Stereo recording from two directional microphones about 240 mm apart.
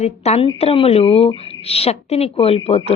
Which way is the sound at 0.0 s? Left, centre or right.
Left.